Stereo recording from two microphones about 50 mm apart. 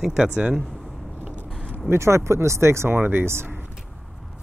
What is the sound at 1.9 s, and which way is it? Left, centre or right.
Speech, right.